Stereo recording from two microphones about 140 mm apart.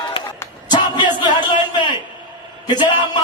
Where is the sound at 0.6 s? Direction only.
30° left (ahead or behind).